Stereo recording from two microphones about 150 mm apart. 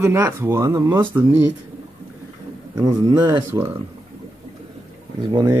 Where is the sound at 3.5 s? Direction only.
15° right (ahead or behind).